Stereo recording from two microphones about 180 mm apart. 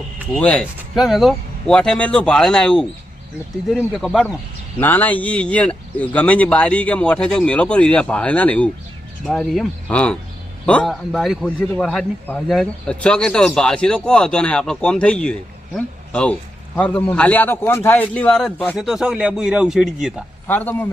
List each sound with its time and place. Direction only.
0.3 s a man's voice: 5° left (ahead or behind)
4.8 s a man's voice: 10° left (ahead or behind)
20.5 s speech: 10° left (ahead or behind)